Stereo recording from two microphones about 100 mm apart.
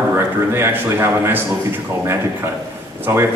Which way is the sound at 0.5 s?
20° right (ahead or behind).